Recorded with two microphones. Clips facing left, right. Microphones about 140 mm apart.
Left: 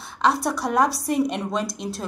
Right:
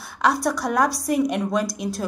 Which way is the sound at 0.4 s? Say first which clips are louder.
Even; 5° left (ahead or behind).